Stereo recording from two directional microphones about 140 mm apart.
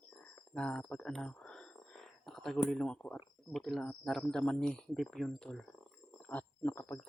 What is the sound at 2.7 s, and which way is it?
Speech, 5° left (ahead or behind).